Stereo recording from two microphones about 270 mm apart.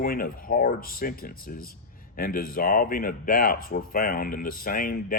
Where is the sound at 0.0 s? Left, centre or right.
Left.